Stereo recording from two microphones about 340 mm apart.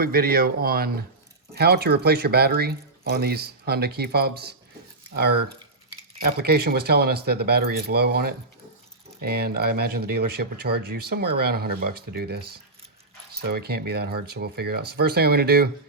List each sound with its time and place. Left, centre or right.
0.0 s speech: right
6.3 s speech: right